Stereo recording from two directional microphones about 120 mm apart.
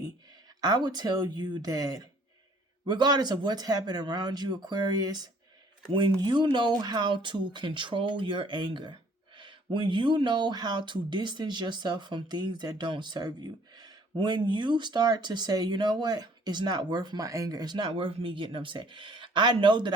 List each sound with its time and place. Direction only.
0.6 s speech: 35° right (ahead or behind)